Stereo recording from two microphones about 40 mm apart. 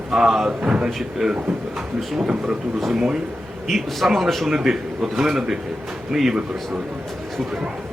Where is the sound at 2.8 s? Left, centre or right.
Centre.